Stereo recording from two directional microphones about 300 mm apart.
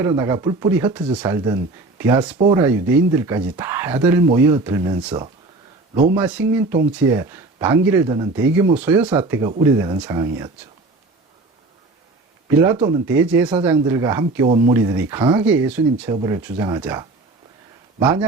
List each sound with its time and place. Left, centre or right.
0.0 s speech: centre
13.1 s speech: centre